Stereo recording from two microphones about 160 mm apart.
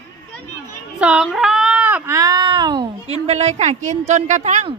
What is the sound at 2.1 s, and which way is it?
Speech, 25° right (ahead or behind).